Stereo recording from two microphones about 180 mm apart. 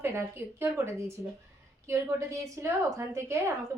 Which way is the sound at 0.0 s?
15° right (ahead or behind).